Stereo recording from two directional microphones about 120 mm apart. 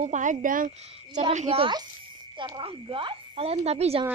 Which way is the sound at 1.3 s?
75° right (ahead or behind).